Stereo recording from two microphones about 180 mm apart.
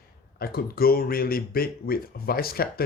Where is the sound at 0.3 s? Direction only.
55° left (ahead or behind).